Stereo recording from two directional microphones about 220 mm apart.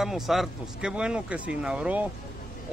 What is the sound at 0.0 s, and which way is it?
Speech, centre (ahead or behind).